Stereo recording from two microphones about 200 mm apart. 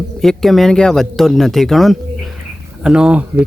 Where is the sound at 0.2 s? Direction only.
Centre (ahead or behind).